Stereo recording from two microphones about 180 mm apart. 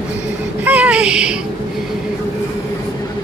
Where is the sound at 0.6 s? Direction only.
10° right (ahead or behind).